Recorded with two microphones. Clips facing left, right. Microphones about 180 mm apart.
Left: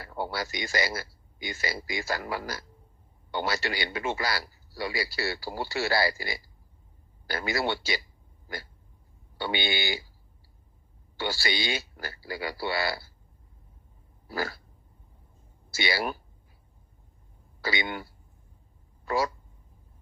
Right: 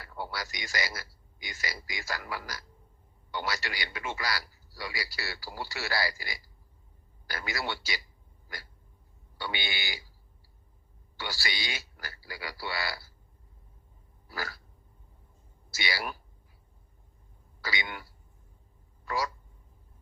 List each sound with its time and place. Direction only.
0.0 s a man's voice: 25° left (ahead or behind)
9.4 s a man's voice: 25° left (ahead or behind)
11.2 s a man's voice: 25° left (ahead or behind)
14.3 s a man's voice: 25° left (ahead or behind)
15.7 s a man's voice: 25° left (ahead or behind)
17.6 s a man's voice: 25° left (ahead or behind)